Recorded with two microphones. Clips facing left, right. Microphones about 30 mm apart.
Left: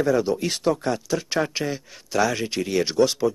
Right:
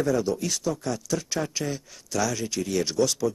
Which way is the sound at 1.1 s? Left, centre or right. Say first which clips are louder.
Left 4 dB; left.